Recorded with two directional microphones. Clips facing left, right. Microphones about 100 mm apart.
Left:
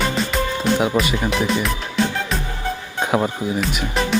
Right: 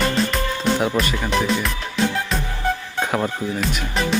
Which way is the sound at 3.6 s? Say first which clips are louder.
Left 1 dB; centre (ahead or behind).